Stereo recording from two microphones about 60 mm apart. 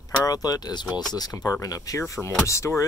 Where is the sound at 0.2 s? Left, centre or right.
Left.